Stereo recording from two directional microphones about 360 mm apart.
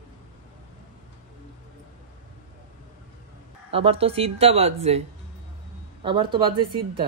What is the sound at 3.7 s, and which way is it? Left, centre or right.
Speech, centre.